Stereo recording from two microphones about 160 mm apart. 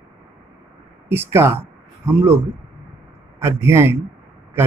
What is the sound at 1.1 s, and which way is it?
Speech, 15° right (ahead or behind).